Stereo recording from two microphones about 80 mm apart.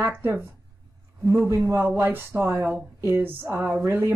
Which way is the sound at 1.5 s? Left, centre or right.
Right.